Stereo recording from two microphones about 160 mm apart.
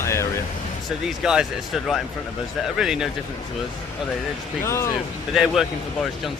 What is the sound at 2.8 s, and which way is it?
Speech, 5° right (ahead or behind).